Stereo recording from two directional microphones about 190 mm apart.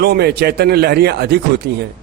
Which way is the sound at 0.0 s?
55° right (ahead or behind).